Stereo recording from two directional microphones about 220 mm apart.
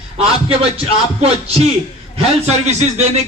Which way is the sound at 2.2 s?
30° right (ahead or behind).